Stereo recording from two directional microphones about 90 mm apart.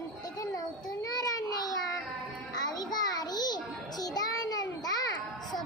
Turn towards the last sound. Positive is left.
turn(degrees=45)  # may be behind; listen again after turning